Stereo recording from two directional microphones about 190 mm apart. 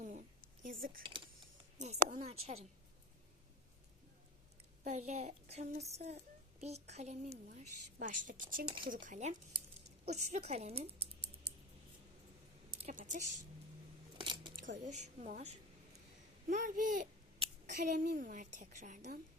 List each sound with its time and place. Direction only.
0.0 s a sound: 45° right (ahead or behind)
0.6 s a child's voice: 45° right (ahead or behind)
4.8 s a child's voice: 40° right (ahead or behind)
12.8 s speech: 45° right (ahead or behind)
14.2 s a sound: 25° right (ahead or behind)
14.8 s a child's voice: 40° right (ahead or behind)